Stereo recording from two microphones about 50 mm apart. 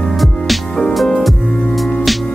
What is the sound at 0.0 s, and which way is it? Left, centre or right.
Music, centre.